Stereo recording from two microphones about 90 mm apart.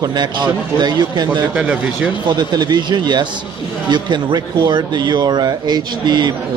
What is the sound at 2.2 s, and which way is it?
A man's voice, 50° right (ahead or behind).